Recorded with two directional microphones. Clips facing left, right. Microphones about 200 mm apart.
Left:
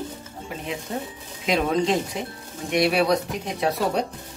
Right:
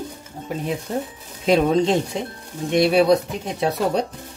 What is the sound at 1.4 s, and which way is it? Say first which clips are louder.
Speech: right 5 dB; 25° right (ahead or behind).